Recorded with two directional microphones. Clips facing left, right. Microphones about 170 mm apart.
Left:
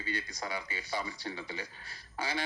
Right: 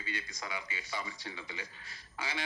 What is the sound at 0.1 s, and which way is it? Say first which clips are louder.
A man's voice: left 4 dB; 35° left (ahead or behind).